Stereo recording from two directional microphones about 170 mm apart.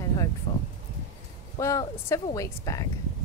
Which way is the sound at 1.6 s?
20° left (ahead or behind).